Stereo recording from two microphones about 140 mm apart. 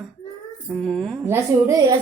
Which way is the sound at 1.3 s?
25° right (ahead or behind).